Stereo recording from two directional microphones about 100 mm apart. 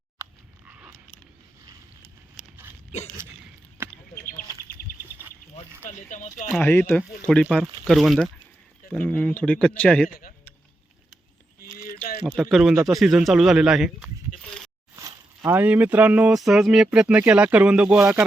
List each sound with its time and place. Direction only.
0.7 s a sound: 10° right (ahead or behind)
5.0 s insect: 20° right (ahead or behind)
6.6 s speech: 20° left (ahead or behind)
7.9 s speech: centre (ahead or behind)
8.9 s speech: 15° left (ahead or behind)
12.2 s speech: centre (ahead or behind)
15.4 s speech: 20° right (ahead or behind)
16.3 s speech: 5° right (ahead or behind)